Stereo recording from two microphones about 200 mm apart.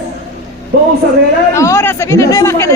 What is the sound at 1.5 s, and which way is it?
Speech, 15° left (ahead or behind).